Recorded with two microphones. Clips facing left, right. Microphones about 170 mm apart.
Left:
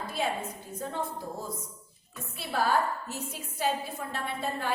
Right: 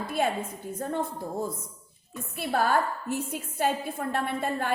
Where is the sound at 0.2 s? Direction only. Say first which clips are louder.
Right 4 dB; 50° right (ahead or behind).